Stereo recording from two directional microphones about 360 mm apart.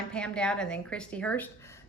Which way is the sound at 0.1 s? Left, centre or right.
Centre.